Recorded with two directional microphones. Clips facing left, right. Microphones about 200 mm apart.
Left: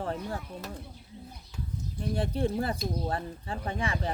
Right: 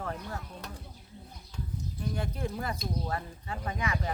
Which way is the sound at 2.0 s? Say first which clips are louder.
Left 6 dB; 30° left (ahead or behind).